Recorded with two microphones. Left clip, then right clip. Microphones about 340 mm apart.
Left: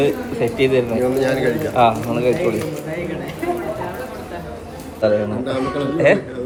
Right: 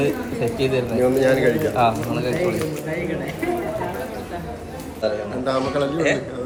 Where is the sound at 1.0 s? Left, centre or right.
Centre.